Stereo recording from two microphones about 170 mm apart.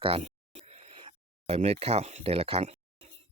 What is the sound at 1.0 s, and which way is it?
Speech, 35° right (ahead or behind).